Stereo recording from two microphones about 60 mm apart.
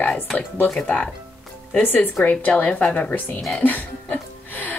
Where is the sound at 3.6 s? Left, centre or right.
Left.